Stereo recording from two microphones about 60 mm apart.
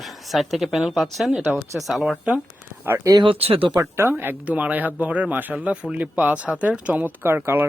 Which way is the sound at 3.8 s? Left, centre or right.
Right.